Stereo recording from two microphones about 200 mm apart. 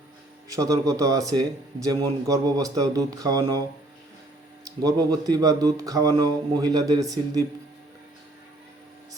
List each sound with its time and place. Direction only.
0.4 s speech: 15° right (ahead or behind)
4.6 s speech: 20° right (ahead or behind)